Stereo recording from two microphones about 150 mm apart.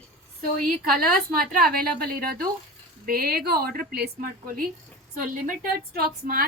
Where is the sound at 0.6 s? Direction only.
75° right (ahead or behind).